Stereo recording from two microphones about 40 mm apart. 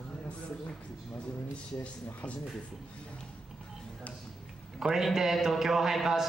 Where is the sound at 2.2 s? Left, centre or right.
Left.